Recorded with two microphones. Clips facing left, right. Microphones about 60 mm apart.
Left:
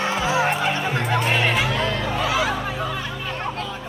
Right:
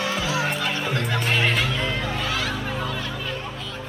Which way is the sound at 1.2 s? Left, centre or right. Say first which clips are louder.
Left 2 dB; centre.